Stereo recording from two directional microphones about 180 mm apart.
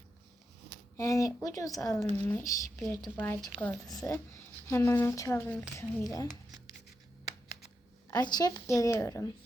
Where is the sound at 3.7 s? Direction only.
Centre (ahead or behind).